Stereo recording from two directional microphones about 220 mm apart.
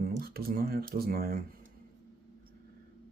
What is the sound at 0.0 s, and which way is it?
Speech, 45° right (ahead or behind).